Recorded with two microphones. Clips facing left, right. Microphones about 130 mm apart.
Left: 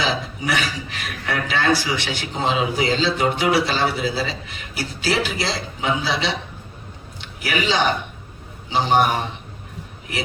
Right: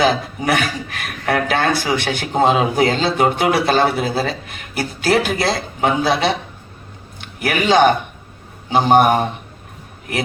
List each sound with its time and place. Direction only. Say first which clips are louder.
0.0 s a man's voice: right 7 dB; 50° right (ahead or behind)